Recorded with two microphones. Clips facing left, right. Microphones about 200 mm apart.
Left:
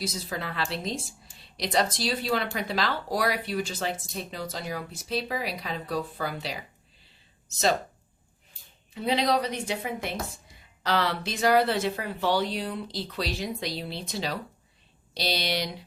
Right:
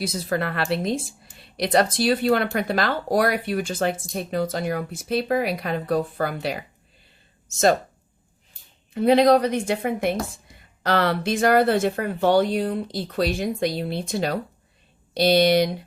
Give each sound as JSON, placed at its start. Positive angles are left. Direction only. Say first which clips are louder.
{"t": 0.0, "sound": "speech", "louder": "right 8 dB", "side_deg": -60}
{"t": 9.0, "sound": "speech", "louder": "right 9 dB", "side_deg": -50}